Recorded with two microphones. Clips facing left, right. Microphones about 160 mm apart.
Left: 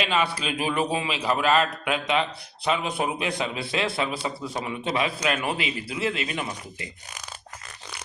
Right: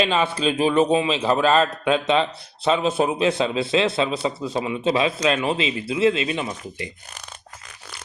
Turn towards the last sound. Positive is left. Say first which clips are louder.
# right 4 dB
turn(degrees=-25)  # may be behind; listen again after turning